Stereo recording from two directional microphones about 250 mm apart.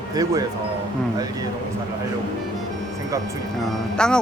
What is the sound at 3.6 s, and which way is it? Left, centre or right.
Speech, centre.